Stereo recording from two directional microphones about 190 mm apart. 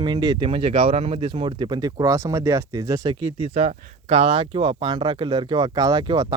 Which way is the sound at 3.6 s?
35° right (ahead or behind).